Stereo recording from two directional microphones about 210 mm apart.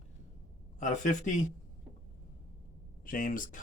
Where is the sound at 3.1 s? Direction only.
40° left (ahead or behind).